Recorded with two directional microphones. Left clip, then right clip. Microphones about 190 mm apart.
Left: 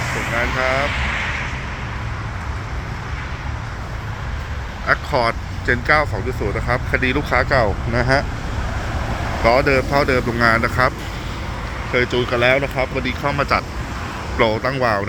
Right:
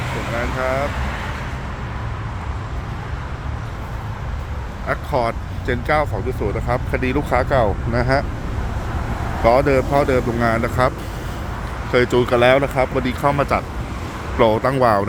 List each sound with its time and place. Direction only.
0.6 s speech: centre (ahead or behind)
0.9 s vehicle: 35° right (ahead or behind)
4.9 s speech: centre (ahead or behind)
9.4 s speech: 15° right (ahead or behind)
11.9 s speech: 30° right (ahead or behind)